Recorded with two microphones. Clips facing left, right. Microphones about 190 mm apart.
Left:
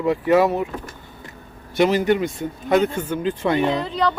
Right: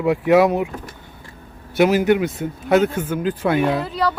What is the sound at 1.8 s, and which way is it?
Speech, 5° right (ahead or behind).